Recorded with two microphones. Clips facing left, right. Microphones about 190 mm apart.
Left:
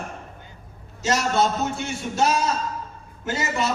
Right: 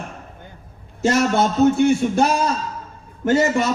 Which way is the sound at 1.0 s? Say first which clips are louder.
Right 4 dB; 55° right (ahead or behind).